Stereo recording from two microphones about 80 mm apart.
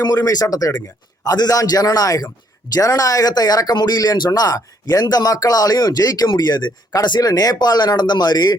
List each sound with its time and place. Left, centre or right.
0.0 s a man's voice: left